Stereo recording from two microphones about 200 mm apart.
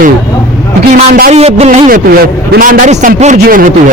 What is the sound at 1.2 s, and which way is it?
A man's voice, 35° right (ahead or behind).